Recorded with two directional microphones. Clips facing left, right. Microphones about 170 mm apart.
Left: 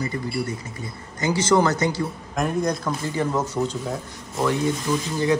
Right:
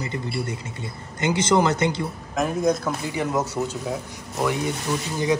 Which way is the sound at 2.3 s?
Centre (ahead or behind).